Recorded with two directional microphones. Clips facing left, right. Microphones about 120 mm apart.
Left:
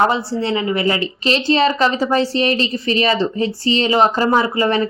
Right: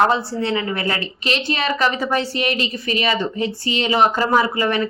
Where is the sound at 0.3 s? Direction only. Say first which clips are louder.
Left 3 dB; 25° left (ahead or behind).